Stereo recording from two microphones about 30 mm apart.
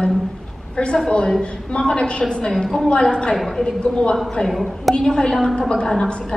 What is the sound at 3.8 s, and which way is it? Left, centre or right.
Speech, left.